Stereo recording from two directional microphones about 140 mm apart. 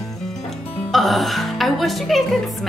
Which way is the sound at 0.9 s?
Centre (ahead or behind).